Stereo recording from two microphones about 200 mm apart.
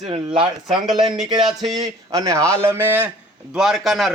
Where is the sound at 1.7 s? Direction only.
15° right (ahead or behind).